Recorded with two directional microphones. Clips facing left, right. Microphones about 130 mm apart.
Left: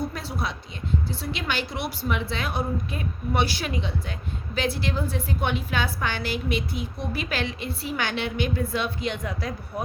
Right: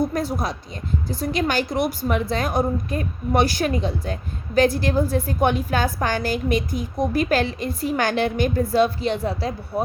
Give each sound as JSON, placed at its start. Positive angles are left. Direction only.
{"t": 0.1, "sound": "a woman's voice", "side_deg": -45}